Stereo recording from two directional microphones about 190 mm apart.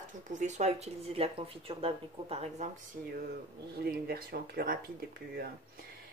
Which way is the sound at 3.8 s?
50° right (ahead or behind).